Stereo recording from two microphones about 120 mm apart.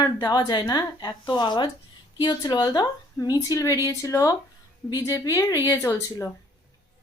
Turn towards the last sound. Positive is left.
turn(degrees=25)  # may be behind; listen again after turning